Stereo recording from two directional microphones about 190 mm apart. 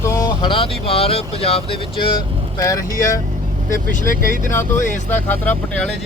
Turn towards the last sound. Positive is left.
turn(degrees=10)  # may be behind; listen again after turning